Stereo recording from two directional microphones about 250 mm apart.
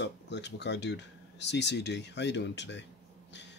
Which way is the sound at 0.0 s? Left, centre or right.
Left.